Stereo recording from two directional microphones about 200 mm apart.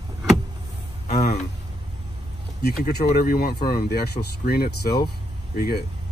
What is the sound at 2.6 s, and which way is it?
Speech, 50° left (ahead or behind).